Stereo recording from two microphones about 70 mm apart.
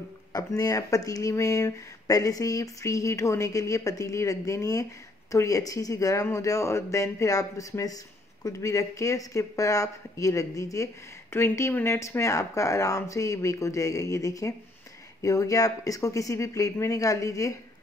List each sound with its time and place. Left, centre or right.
0.3 s speech: left
11.3 s speech: left